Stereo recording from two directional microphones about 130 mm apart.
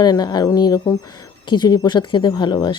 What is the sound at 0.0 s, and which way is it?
Speech, 30° left (ahead or behind).